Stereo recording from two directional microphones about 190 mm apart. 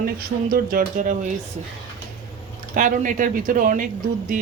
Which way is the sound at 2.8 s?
45° right (ahead or behind).